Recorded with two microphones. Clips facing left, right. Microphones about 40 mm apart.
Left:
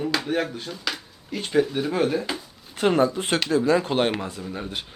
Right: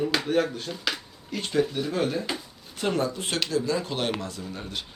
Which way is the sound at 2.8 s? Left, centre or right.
Left.